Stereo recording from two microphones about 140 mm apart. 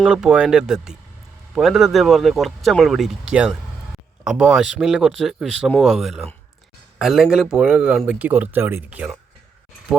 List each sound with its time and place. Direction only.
0.0 s speech: 5° right (ahead or behind)